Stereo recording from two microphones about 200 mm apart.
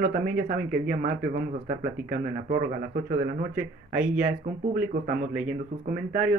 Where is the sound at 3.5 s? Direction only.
5° right (ahead or behind).